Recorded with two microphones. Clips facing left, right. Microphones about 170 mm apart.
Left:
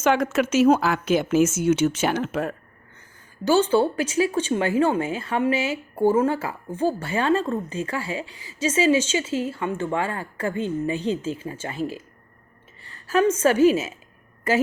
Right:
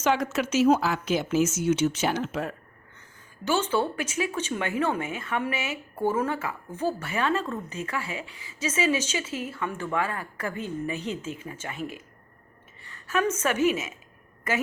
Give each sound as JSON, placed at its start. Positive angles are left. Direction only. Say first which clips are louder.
{"t": 0.0, "sound": "speech", "louder": "left 5 dB", "side_deg": 55}
{"t": 3.4, "sound": "a woman's voice", "louder": "left 7 dB", "side_deg": 35}